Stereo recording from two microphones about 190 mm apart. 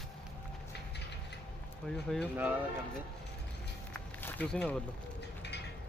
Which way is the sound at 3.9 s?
5° left (ahead or behind).